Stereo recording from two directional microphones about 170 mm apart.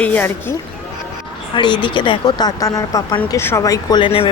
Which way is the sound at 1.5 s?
25° left (ahead or behind).